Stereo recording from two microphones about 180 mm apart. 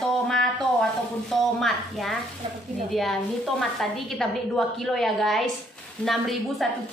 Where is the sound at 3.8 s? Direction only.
Centre (ahead or behind).